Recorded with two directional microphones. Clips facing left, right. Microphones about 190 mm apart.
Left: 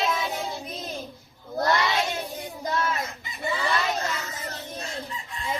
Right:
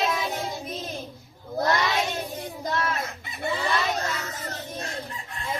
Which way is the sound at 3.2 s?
60° right (ahead or behind).